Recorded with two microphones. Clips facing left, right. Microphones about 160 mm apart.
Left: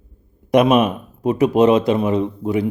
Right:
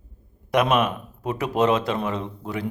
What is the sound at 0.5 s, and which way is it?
Speech, 20° left (ahead or behind).